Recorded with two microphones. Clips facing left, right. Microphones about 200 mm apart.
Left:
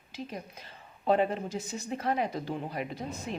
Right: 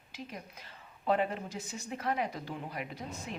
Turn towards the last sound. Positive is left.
turn(degrees=30)  # may be behind; listen again after turning